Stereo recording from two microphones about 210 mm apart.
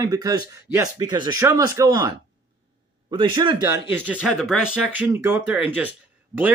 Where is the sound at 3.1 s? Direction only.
20° right (ahead or behind).